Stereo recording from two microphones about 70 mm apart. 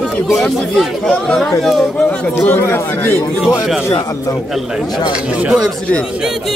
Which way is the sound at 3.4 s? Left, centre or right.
Centre.